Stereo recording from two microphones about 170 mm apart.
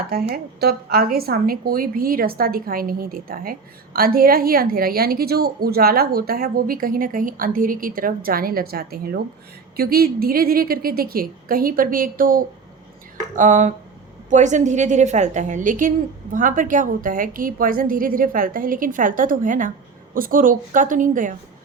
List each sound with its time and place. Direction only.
0.6 s a woman's voice: 65° right (ahead or behind); by 21.3 s 50° right (ahead or behind)